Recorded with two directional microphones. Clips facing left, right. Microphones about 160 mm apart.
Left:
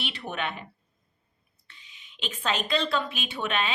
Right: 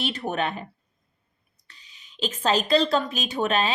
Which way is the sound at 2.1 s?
35° right (ahead or behind).